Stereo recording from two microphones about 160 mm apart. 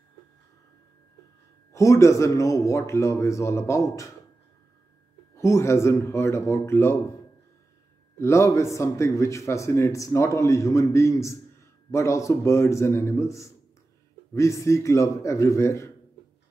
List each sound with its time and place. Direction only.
1.7 s a man's voice: 20° left (ahead or behind)
5.4 s speech: 15° left (ahead or behind)
8.2 s a man's voice: 15° left (ahead or behind)